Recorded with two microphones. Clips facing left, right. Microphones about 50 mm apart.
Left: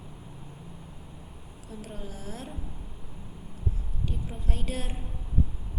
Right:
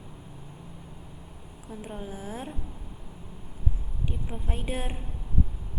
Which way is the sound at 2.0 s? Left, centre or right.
Right.